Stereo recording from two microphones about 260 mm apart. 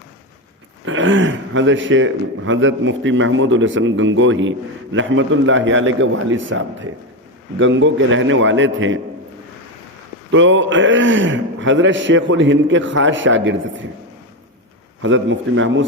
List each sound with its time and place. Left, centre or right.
0.9 s a man's voice: right
10.3 s a man's voice: right
15.0 s a man's voice: right